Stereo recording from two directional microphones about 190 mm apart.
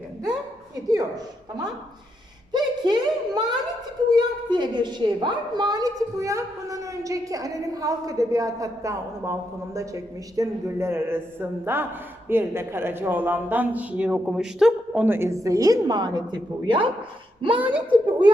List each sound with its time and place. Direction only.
0.9 s a woman's voice: 20° right (ahead or behind)
17.6 s a woman's voice: 10° right (ahead or behind)